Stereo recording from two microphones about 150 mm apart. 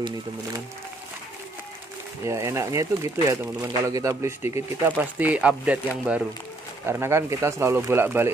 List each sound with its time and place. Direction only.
2.2 s speech: 20° right (ahead or behind)